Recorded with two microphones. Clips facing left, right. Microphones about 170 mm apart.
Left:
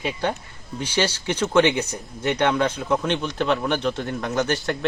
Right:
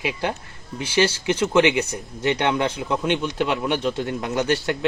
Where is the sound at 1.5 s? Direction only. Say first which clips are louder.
Left 1 dB; 20° right (ahead or behind).